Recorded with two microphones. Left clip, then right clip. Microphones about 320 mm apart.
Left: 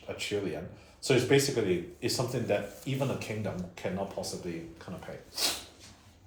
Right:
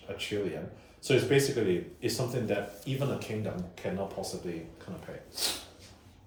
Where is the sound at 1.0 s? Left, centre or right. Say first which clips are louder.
Even; left.